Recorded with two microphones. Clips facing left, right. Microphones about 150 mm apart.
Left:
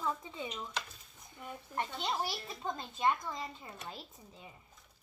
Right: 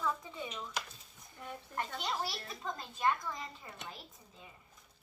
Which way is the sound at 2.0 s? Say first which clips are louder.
Left 2 dB; 20° left (ahead or behind).